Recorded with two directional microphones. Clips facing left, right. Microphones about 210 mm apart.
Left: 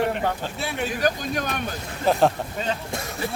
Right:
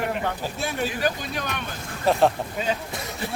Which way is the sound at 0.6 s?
45° right (ahead or behind).